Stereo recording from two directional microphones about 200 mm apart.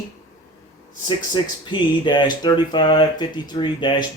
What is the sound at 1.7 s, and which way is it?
Speech, 25° left (ahead or behind).